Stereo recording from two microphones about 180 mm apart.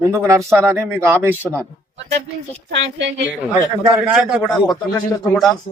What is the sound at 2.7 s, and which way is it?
Speech, 85° right.